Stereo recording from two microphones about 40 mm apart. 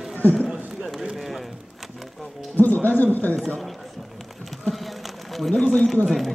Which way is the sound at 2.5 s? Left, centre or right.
Left.